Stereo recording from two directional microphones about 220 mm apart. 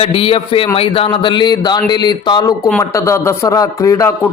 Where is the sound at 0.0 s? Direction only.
25° left (ahead or behind).